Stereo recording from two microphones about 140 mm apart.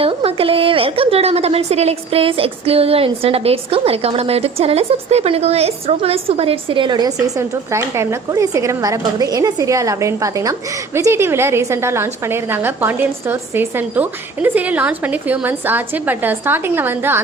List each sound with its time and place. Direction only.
0.0 s a woman's voice: 40° right (ahead or behind); by 17.2 s 15° right (ahead or behind)